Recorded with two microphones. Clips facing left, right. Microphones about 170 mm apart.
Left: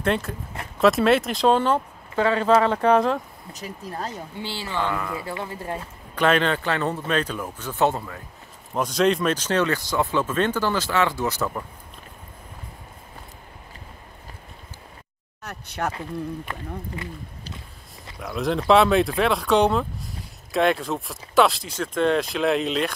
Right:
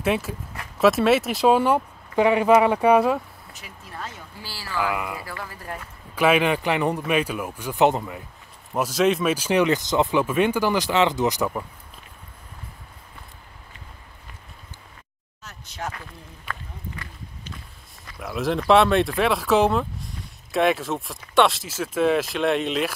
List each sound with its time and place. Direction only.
0.0 s speech: 5° right (ahead or behind)
3.5 s speech: 40° left (ahead or behind)
4.4 s speech: 25° left (ahead or behind)
4.7 s speech: 10° right (ahead or behind)
5.2 s speech: 25° left (ahead or behind)
6.1 s speech: 10° right (ahead or behind)
8.7 s speech: 5° right (ahead or behind)
15.4 s a sound: 65° left (ahead or behind)
16.4 s speech: 25° left (ahead or behind)
18.2 s speech: centre (ahead or behind)